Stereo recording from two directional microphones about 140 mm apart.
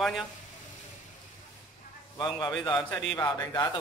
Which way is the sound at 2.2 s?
30° left (ahead or behind).